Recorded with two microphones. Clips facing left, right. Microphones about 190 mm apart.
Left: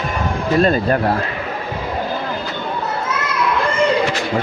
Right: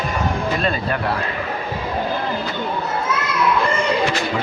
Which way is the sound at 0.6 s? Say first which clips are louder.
Left 7 dB; 45° left (ahead or behind).